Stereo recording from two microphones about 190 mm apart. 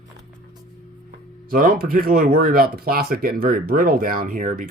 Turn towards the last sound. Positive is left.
turn(degrees=-45)  # may be behind; listen again after turning